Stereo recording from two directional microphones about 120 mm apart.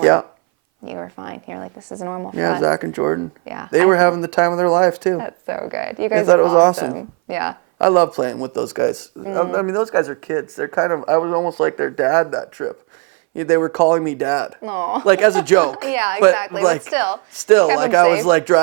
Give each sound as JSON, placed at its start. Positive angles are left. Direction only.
{"t": 0.0, "sound": "speech", "side_deg": -25}